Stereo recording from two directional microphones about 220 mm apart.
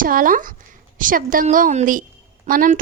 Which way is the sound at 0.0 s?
40° right (ahead or behind).